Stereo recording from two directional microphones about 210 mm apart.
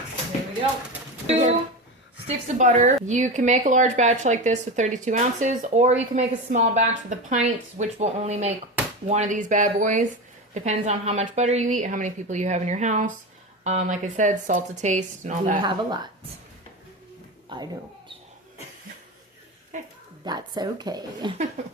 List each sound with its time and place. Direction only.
2.2 s speech: 35° right (ahead or behind)
15.6 s speech: 20° right (ahead or behind)
17.5 s speech: 20° right (ahead or behind)
19.7 s speech: 35° right (ahead or behind)
20.2 s speech: 20° right (ahead or behind)